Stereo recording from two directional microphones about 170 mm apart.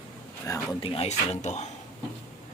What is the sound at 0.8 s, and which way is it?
Speech, 35° left (ahead or behind).